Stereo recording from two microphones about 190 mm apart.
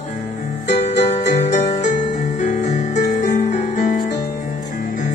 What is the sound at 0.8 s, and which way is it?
Music, 35° left (ahead or behind).